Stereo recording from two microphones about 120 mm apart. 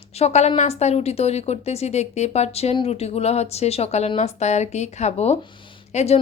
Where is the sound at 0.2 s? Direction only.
65° left (ahead or behind).